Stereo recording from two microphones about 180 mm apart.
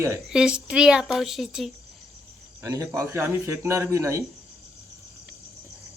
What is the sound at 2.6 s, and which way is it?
Speech, 15° right (ahead or behind).